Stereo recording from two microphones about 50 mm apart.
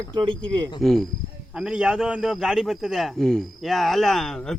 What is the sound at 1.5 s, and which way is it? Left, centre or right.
Speech, centre.